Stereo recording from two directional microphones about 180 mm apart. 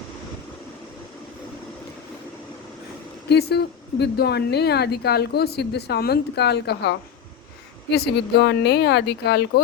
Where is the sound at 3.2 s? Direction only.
65° left (ahead or behind).